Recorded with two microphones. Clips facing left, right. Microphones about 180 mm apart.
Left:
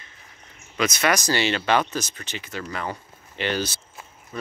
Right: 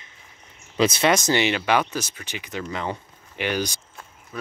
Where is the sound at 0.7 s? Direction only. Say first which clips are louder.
Right 3 dB; 30° right (ahead or behind); by 3.8 s 15° right (ahead or behind).